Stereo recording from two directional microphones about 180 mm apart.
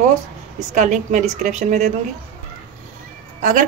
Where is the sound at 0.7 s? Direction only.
45° right (ahead or behind).